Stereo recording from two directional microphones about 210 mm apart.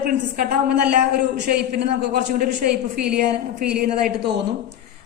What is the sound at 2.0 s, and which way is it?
Speech, 40° right (ahead or behind).